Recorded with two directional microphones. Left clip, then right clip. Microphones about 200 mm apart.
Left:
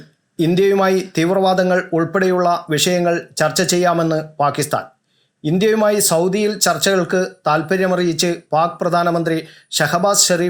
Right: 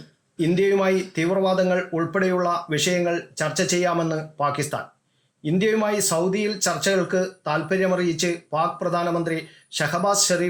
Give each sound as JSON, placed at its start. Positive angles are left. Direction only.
{"t": 0.3, "sound": "speech", "side_deg": 20}